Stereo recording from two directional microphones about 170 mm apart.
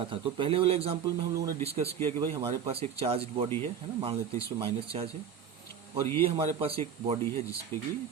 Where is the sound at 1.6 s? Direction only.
35° right (ahead or behind).